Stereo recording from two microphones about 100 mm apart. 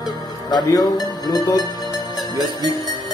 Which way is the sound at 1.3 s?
40° left (ahead or behind).